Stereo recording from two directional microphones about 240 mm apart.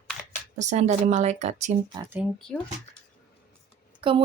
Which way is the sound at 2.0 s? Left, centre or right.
Centre.